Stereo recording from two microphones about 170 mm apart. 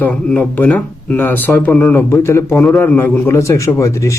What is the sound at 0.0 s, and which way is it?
Speech, 10° left (ahead or behind).